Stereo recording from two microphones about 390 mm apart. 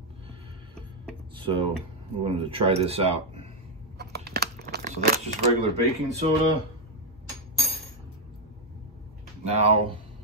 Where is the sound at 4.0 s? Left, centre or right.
Right.